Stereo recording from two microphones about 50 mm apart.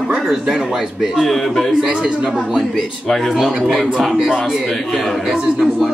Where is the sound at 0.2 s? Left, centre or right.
Centre.